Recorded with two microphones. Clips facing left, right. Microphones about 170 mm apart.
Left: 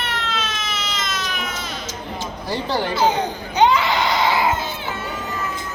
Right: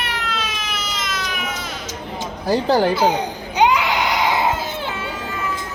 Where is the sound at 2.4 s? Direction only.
40° right (ahead or behind).